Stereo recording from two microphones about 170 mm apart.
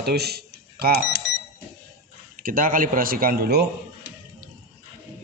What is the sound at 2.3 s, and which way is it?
Speech, 55° right (ahead or behind).